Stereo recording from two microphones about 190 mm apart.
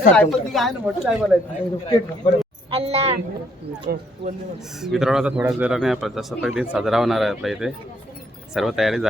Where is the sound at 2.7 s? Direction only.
30° right (ahead or behind).